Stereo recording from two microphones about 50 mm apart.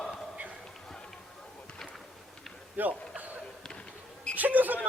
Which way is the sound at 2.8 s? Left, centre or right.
Right.